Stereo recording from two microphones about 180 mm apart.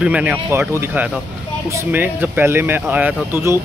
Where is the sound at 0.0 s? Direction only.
5° right (ahead or behind).